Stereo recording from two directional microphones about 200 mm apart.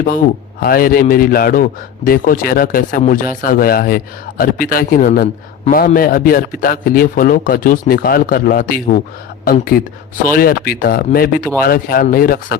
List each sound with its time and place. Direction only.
0.6 s a man's voice: 45° left (ahead or behind)